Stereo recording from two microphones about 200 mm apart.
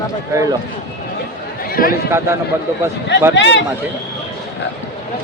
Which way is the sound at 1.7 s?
45° left (ahead or behind).